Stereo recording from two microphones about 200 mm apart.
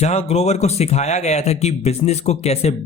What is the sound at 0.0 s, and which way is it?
Speech, 35° left (ahead or behind).